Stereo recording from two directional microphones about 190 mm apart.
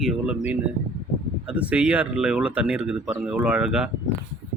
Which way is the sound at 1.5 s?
5° right (ahead or behind).